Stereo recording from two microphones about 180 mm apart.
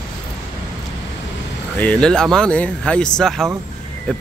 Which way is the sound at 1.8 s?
5° left (ahead or behind).